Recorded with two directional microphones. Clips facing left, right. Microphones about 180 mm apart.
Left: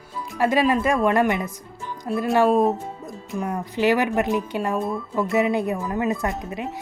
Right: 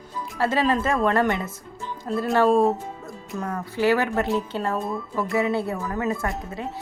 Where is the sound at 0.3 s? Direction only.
15° left (ahead or behind).